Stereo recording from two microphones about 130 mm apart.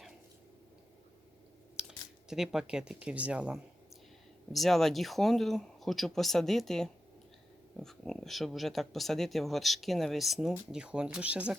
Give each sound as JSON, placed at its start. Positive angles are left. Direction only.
{"t": 1.8, "sound": "computer keyboard", "side_deg": -5}
{"t": 2.3, "sound": "speech", "side_deg": -5}